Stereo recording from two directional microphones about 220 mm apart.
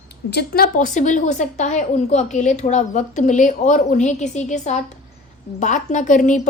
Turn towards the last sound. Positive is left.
turn(degrees=35)  # may be behind; listen again after turning